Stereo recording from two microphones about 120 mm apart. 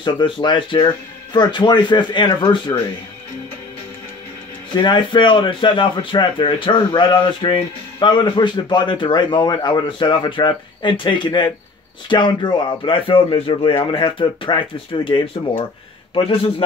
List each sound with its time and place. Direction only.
0.0 s speech: 40° left (ahead or behind)
4.7 s speech: 40° left (ahead or behind)